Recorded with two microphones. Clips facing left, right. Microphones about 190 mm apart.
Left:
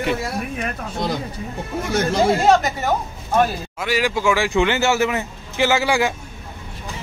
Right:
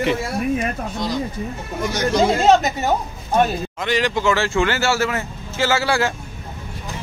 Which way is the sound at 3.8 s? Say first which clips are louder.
Even; 5° left (ahead or behind).